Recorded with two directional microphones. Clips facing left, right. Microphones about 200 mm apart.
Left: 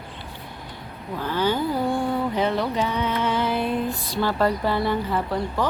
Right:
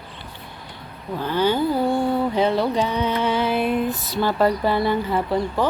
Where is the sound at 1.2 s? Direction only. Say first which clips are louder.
Right 3 dB; 25° right (ahead or behind).